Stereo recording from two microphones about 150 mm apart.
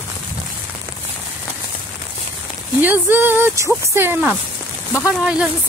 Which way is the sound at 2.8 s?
10° right (ahead or behind).